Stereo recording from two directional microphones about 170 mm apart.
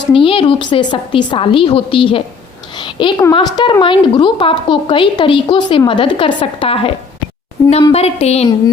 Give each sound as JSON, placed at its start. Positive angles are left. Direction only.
{"t": 0.1, "sound": "a woman's voice", "side_deg": 30}
{"t": 7.6, "sound": "a woman's voice", "side_deg": 15}
{"t": 7.9, "sound": "a woman's voice", "side_deg": 35}